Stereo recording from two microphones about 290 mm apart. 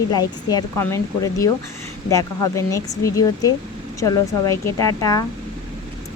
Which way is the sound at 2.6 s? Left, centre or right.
Centre.